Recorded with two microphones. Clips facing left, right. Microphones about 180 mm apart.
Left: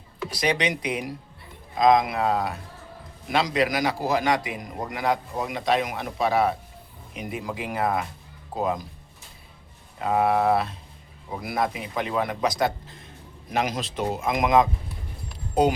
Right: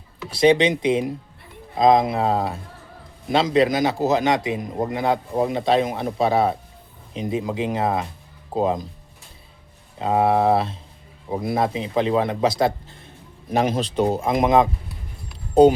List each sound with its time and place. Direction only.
0.3 s a man's voice: 25° right (ahead or behind)
10.0 s a man's voice: 25° right (ahead or behind)